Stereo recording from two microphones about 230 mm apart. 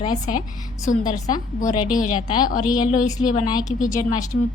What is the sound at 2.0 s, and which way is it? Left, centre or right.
A woman's voice, left.